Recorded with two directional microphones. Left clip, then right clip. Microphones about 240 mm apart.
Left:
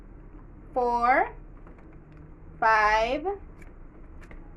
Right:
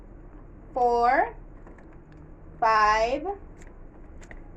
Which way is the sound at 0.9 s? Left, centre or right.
Left.